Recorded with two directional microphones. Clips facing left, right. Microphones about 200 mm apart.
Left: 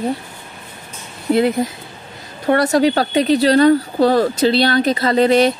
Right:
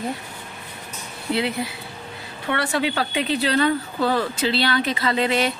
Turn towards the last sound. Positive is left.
turn(degrees=40)  # may be behind; listen again after turning